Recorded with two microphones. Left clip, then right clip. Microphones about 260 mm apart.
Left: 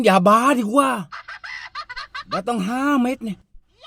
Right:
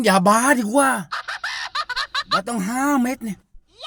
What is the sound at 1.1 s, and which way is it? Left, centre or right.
Chicken, right.